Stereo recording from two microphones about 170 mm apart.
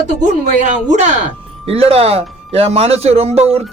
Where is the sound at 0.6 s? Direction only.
45° right (ahead or behind).